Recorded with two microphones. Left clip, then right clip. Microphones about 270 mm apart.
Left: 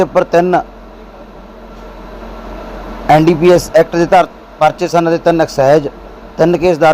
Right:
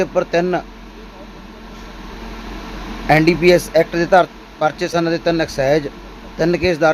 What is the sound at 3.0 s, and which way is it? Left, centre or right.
A man's voice, centre.